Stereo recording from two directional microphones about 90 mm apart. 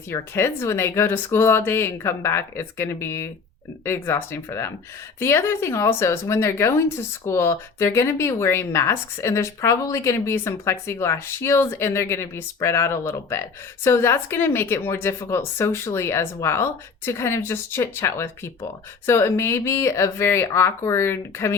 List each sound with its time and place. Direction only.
0.1 s a woman's voice: 30° left (ahead or behind)